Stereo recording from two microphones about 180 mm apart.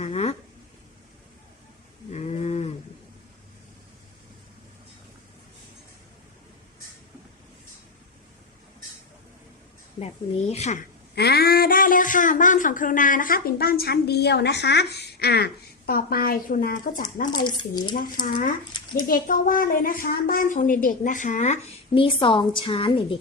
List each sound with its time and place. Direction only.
0.0 s a sound: 35° left (ahead or behind)
2.1 s a sound: 35° left (ahead or behind)
10.5 s speech: 40° left (ahead or behind)
11.1 s speech: 65° left (ahead or behind)
17.4 s speech: 25° left (ahead or behind)
17.9 s a woman's voice: 50° left (ahead or behind); by 23.1 s 30° left (ahead or behind)